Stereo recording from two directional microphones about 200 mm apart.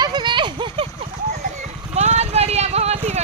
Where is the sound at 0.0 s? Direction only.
20° right (ahead or behind).